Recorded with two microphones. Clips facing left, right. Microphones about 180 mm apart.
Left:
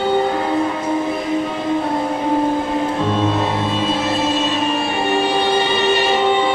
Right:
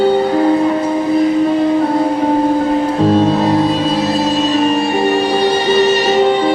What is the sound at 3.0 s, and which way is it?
Music, 35° right (ahead or behind).